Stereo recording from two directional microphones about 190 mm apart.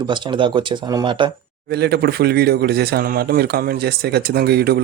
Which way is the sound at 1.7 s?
60° right (ahead or behind).